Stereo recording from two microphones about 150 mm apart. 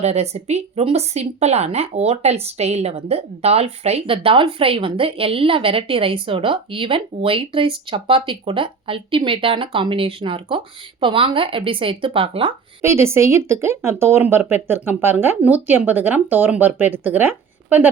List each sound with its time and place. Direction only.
0.0 s speech: 45° right (ahead or behind)
12.8 s speech: 15° right (ahead or behind)